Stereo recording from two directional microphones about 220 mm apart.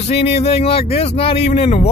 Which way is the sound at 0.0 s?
30° left (ahead or behind).